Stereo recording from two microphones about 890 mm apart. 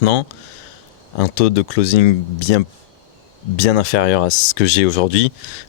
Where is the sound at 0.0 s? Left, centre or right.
Left.